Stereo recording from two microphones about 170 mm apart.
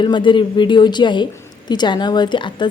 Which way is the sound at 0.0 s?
30° left (ahead or behind).